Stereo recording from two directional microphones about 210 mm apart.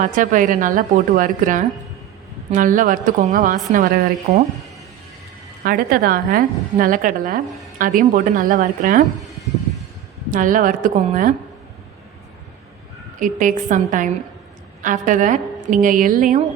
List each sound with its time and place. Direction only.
0.0 s a woman's voice: 40° right (ahead or behind)
5.6 s a woman's voice: 45° right (ahead or behind)
10.3 s a woman's voice: 40° right (ahead or behind)
13.1 s a woman's voice: 40° right (ahead or behind)